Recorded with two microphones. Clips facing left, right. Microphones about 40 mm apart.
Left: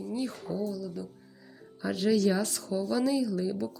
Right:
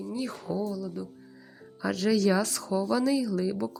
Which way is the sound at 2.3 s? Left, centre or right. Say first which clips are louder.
Right 3 dB; right.